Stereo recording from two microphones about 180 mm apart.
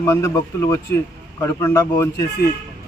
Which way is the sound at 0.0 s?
15° left (ahead or behind).